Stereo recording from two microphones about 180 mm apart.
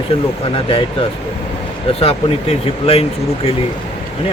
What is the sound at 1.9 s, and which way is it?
Speech, 35° left (ahead or behind).